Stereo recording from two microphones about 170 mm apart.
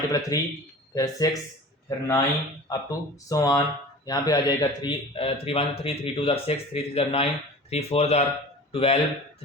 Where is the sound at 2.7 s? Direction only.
20° left (ahead or behind).